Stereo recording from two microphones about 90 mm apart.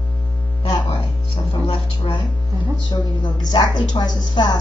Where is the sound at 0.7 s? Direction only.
75° left (ahead or behind).